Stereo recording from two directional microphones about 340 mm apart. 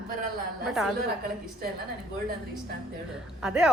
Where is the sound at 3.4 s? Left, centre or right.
Centre.